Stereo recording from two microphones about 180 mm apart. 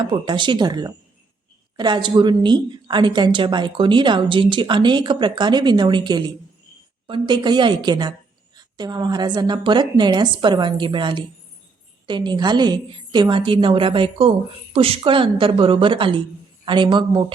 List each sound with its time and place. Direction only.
0.1 s a woman's voice: 25° right (ahead or behind)